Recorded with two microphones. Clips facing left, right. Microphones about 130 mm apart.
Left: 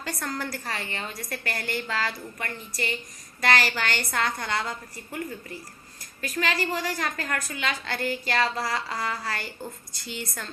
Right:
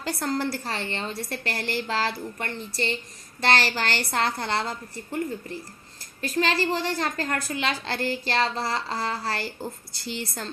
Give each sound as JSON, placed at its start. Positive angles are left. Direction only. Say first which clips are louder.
{"t": 0.0, "sound": "a woman's voice", "louder": "right 5 dB", "side_deg": -30}
{"t": 6.2, "sound": "a woman's voice", "louder": "right 3 dB", "side_deg": -30}